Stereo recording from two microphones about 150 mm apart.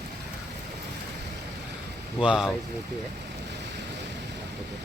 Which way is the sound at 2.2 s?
5° right (ahead or behind).